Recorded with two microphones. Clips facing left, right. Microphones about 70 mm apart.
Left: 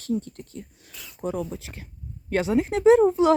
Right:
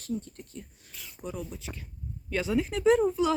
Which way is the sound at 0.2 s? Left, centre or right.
Left.